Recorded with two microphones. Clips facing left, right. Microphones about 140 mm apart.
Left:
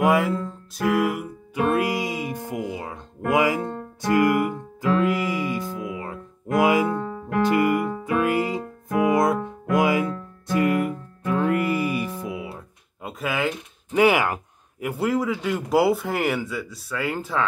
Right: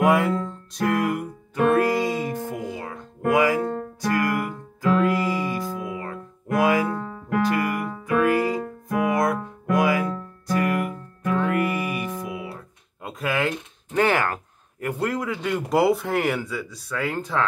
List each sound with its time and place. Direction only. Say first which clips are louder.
0.0 s music: right 1 dB; centre (ahead or behind); by 12.5 s 25° left (ahead or behind)
13.0 s speech: right 1 dB; centre (ahead or behind)